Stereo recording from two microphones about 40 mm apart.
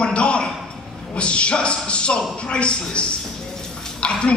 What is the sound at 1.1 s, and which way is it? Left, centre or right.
A man's voice, left.